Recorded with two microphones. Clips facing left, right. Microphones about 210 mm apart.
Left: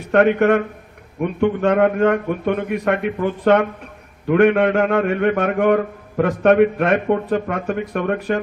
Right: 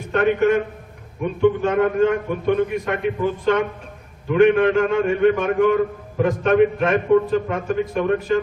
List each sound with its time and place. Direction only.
0.1 s a man's voice: 65° left (ahead or behind)